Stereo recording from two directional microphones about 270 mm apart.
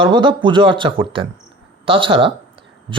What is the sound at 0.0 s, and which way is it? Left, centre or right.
A man's voice, centre.